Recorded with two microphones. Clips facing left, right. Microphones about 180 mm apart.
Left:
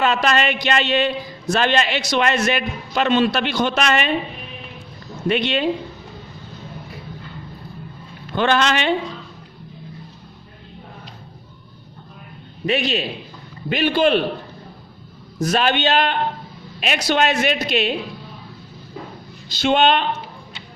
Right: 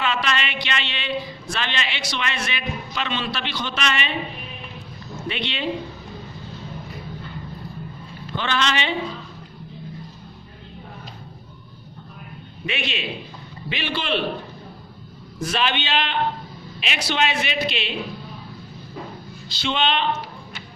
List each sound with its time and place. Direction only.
0.0 s a man's voice: 45° left (ahead or behind)
5.3 s a man's voice: 45° left (ahead or behind)
8.4 s a man's voice: 50° left (ahead or behind)
12.6 s a man's voice: 40° left (ahead or behind)
15.4 s a man's voice: 40° left (ahead or behind)
19.5 s a man's voice: 45° left (ahead or behind)